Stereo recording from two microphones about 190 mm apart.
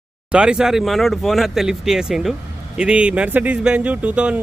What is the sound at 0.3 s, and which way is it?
Speech, 5° right (ahead or behind).